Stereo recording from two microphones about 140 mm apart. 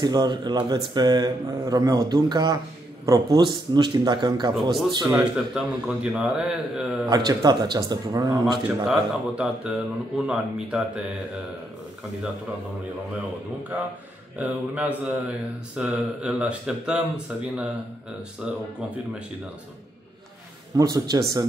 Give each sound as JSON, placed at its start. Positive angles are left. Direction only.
{"t": 0.0, "sound": "a man's voice", "side_deg": -30}
{"t": 5.0, "sound": "speech", "side_deg": -5}
{"t": 7.1, "sound": "speech", "side_deg": -30}
{"t": 8.6, "sound": "speech", "side_deg": -5}
{"t": 14.4, "sound": "speech", "side_deg": -10}
{"t": 20.7, "sound": "speech", "side_deg": -25}